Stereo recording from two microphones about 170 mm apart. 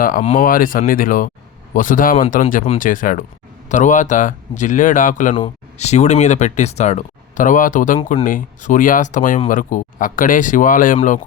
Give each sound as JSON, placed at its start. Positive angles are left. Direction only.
{"t": 0.0, "sound": "speech", "side_deg": 55}